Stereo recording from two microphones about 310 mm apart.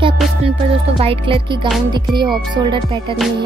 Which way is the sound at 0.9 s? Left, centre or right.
Centre.